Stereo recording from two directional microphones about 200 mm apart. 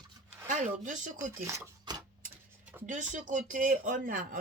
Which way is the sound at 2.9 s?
40° right (ahead or behind).